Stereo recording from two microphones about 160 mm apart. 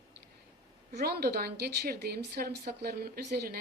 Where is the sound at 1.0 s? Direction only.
80° right.